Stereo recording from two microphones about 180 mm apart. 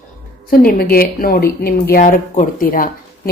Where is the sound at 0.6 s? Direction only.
55° left (ahead or behind).